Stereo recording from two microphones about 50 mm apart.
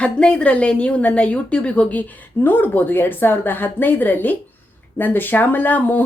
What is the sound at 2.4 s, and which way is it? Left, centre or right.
Speech, left.